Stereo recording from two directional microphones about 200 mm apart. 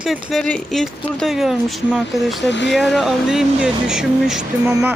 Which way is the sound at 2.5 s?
65° left (ahead or behind).